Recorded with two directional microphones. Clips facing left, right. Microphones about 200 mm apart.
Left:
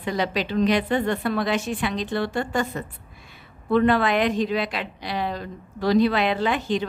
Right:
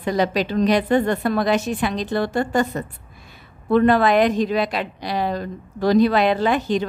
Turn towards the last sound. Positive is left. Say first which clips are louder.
# right 4 dB
turn(degrees=-40)  # may be behind; listen again after turning